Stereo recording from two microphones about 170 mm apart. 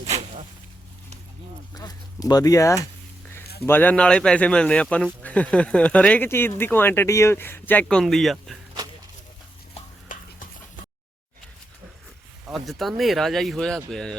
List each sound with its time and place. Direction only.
0.1 s zipper: 40° right (ahead or behind)
1.7 s a sound: 20° left (ahead or behind)
3.6 s speech: 10° left (ahead or behind)
10.1 s stir: 50° left (ahead or behind)
12.5 s speech: centre (ahead or behind)